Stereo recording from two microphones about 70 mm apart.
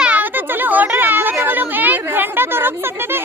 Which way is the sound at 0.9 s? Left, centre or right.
Right.